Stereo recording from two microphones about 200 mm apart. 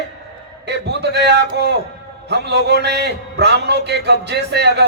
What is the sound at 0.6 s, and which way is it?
A man's voice, 60° right (ahead or behind).